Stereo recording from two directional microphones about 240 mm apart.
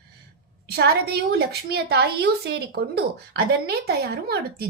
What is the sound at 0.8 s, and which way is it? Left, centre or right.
A woman's voice, right.